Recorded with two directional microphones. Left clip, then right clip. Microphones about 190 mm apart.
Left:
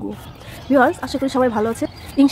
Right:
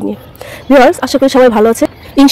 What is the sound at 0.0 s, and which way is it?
A woman's voice, 50° right (ahead or behind).